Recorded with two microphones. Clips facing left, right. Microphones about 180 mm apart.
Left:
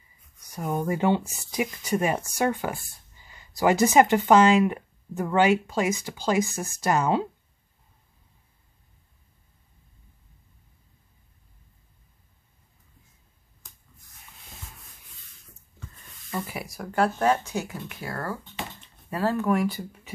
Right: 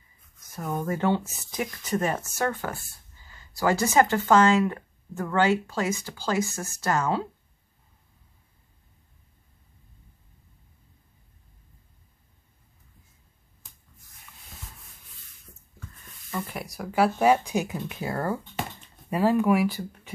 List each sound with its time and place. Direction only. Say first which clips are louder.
0.4 s speech: left 2 dB; 15° left (ahead or behind)
16.3 s speech: left 1 dB; 5° left (ahead or behind)